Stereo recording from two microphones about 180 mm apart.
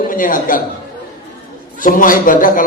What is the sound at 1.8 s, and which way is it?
Speech, 50° left (ahead or behind).